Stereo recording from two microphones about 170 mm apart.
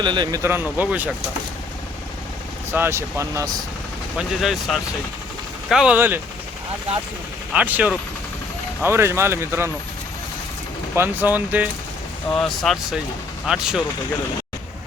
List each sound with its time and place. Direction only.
0.0 s speech: 25° right (ahead or behind); by 1.1 s 10° right (ahead or behind)
2.7 s speech: 15° right (ahead or behind)
4.2 s speech: centre (ahead or behind)
7.5 s speech: 10° right (ahead or behind)
10.9 s speech: 10° right (ahead or behind)
12.3 s speech: centre (ahead or behind)